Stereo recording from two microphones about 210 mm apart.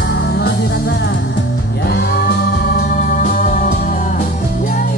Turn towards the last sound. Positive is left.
turn(degrees=40)  # may be behind; listen again after turning